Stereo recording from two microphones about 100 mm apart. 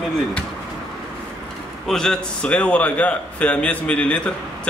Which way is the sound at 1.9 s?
5° left (ahead or behind).